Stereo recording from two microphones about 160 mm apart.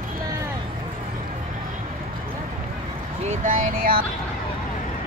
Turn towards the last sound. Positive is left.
turn(degrees=-60)  # may be behind; listen again after turning